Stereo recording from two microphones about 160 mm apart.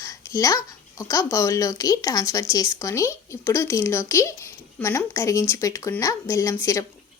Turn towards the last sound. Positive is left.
turn(degrees=20)  # may be behind; listen again after turning